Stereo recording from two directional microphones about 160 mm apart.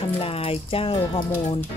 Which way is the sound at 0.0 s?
35° left (ahead or behind).